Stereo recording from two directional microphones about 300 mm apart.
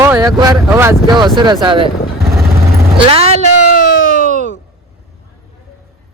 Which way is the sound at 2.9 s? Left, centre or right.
Centre.